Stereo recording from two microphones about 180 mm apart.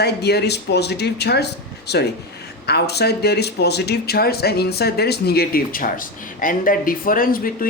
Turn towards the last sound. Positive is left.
turn(degrees=50)  # may be behind; listen again after turning